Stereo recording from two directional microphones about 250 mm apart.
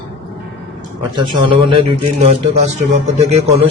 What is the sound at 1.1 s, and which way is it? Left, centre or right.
A man's voice, centre.